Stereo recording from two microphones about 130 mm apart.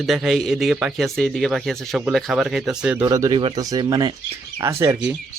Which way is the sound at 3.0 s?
25° right (ahead or behind).